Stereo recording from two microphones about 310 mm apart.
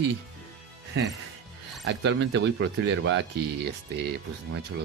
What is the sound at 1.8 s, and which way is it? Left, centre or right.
Speech, right.